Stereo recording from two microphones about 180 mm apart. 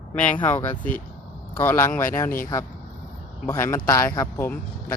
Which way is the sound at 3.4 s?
15° left (ahead or behind).